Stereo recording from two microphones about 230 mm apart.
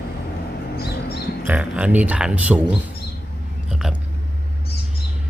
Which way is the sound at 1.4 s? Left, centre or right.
Centre.